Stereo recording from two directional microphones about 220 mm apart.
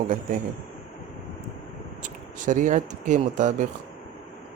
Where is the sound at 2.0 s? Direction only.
35° right (ahead or behind).